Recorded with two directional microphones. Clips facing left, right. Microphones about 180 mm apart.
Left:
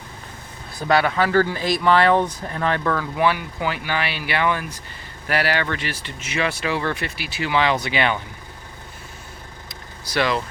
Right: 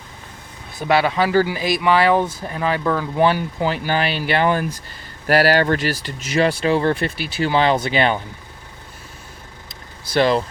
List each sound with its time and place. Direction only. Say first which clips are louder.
0.8 s speech: right 1 dB; 20° right (ahead or behind)
3.2 s speech: right 4 dB; 30° right (ahead or behind)
10.1 s speech: right 5 dB; 30° right (ahead or behind)